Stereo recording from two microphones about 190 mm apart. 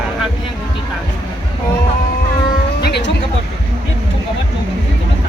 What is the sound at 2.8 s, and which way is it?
Music, 60° left (ahead or behind).